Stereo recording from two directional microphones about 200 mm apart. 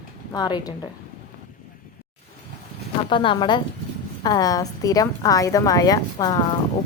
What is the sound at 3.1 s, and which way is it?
A woman's voice, 25° left (ahead or behind).